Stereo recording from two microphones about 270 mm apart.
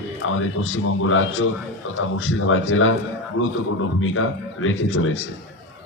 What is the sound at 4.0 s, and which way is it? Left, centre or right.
A man's voice, left.